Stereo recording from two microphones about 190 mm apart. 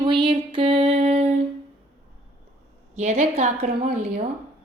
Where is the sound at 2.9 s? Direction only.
35° right (ahead or behind).